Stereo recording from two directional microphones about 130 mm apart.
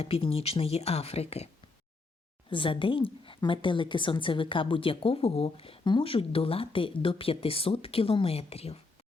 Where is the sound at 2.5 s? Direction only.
40° left (ahead or behind).